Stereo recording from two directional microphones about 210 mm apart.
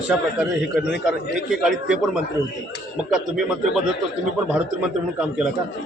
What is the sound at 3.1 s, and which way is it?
Speech, centre (ahead or behind).